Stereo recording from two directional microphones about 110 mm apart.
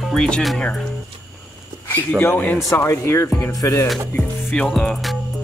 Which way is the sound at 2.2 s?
20° left (ahead or behind).